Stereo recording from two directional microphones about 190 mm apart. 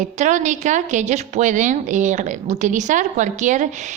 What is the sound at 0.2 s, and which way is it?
A woman's voice, 40° right (ahead or behind).